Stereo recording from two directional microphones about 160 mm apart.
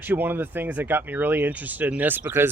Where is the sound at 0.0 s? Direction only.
10° right (ahead or behind).